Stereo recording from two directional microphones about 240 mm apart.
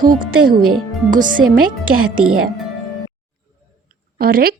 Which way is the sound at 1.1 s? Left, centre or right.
Right.